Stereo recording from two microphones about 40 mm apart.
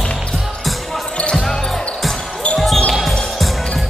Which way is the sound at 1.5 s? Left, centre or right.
Centre.